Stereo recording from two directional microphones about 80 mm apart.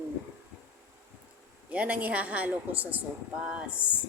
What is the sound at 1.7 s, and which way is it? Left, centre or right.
Speech, centre.